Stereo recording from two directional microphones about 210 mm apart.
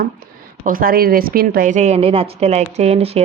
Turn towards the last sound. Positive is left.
turn(degrees=-30)  # may be behind; listen again after turning